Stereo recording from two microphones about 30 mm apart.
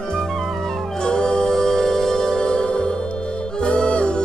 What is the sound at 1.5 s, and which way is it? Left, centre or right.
Music, centre.